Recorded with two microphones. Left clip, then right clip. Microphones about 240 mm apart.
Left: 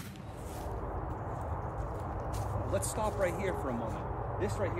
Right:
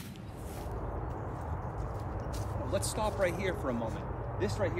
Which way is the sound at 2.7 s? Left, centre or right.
Centre.